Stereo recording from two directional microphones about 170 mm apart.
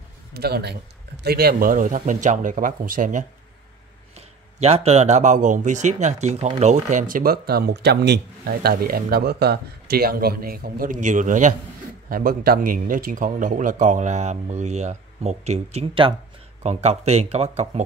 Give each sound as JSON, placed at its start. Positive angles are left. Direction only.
{"t": 0.3, "sound": "a man's voice", "side_deg": -70}
{"t": 4.6, "sound": "speech", "side_deg": -35}